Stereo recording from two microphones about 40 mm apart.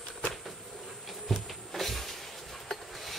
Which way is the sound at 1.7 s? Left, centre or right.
Centre.